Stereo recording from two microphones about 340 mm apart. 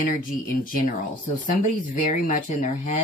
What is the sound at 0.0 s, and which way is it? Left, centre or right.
Speech, left.